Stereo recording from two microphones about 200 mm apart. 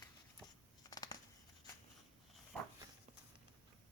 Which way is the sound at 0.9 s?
20° left (ahead or behind).